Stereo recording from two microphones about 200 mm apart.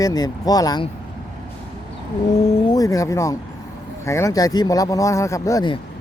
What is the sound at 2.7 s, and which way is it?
Speech, 15° left (ahead or behind).